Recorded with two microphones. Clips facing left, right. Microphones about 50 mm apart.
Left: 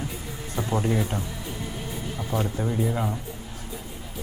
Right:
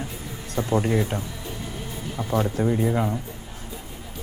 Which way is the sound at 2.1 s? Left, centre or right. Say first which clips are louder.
Right 5 dB; centre.